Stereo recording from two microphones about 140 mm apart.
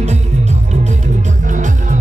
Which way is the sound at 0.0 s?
55° right (ahead or behind).